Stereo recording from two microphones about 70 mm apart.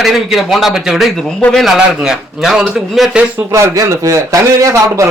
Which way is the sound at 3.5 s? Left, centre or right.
Right.